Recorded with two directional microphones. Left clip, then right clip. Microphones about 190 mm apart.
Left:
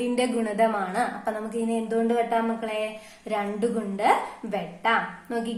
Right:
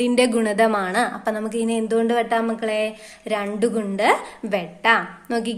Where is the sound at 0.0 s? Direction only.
40° right (ahead or behind).